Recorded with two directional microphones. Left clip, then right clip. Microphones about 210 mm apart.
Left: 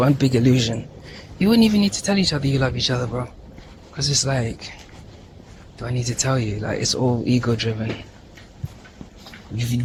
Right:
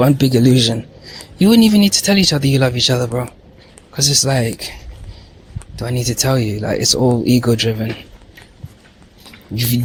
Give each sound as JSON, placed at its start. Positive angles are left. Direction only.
{"t": 0.0, "sound": "a man's voice", "side_deg": -45}